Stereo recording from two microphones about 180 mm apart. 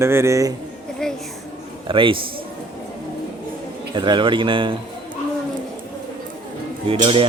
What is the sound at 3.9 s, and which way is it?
Speech, 25° right (ahead or behind).